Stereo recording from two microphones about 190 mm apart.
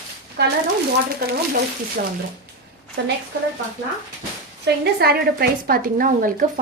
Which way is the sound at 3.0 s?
65° right (ahead or behind).